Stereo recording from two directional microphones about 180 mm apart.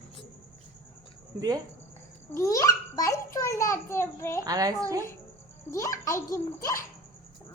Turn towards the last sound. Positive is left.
turn(degrees=15)  # may be behind; listen again after turning